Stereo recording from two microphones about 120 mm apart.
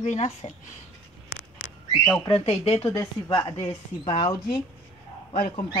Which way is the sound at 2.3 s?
55° left (ahead or behind).